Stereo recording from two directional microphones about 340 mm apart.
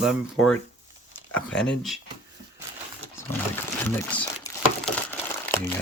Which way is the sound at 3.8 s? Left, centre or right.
Centre.